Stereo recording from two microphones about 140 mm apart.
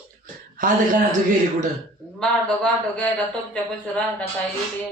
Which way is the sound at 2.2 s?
5° left (ahead or behind).